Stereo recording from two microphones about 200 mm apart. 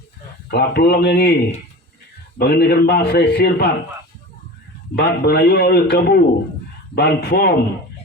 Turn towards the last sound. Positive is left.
turn(degrees=50)  # may be behind; listen again after turning